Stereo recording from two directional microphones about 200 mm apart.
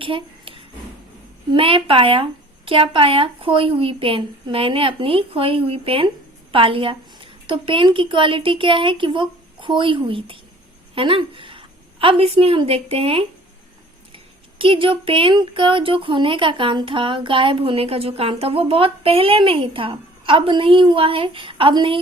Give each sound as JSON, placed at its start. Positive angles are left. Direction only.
{"t": 0.0, "sound": "a sound", "side_deg": -25}
{"t": 1.5, "sound": "a woman's voice", "side_deg": -25}
{"t": 14.6, "sound": "a woman's voice", "side_deg": -25}